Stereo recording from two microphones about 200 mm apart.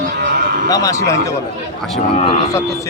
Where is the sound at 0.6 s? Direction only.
15° left (ahead or behind).